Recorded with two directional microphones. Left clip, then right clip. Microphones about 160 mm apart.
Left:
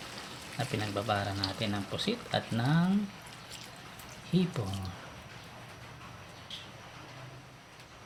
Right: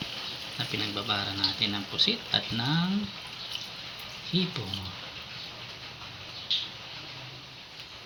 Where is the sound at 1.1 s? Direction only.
80° left.